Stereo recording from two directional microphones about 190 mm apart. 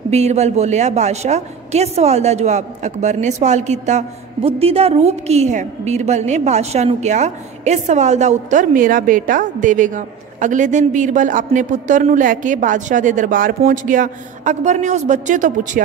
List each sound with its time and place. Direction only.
0.1 s a woman's voice: 35° right (ahead or behind)